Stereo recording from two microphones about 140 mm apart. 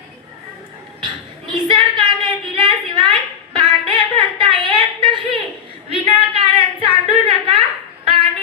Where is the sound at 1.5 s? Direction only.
35° right (ahead or behind).